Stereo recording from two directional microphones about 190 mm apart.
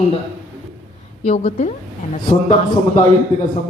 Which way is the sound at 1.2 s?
35° left (ahead or behind).